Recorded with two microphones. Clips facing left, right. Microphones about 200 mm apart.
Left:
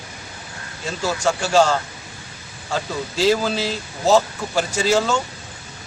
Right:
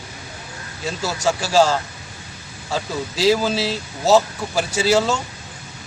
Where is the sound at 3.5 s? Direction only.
35° right (ahead or behind).